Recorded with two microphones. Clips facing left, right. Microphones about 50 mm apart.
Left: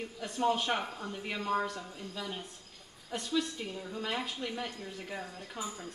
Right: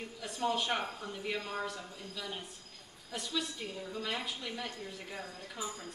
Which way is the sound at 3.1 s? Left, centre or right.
Left.